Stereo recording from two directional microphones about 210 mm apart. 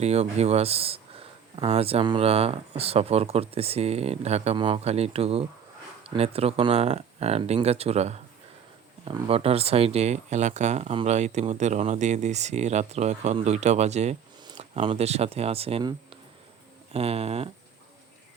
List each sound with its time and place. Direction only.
0.0 s speech: 30° right (ahead or behind)